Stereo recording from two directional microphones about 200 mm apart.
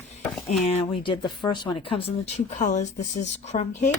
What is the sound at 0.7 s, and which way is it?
Speech, 30° left (ahead or behind).